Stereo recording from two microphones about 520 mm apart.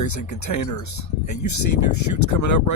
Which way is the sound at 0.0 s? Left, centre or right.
Left.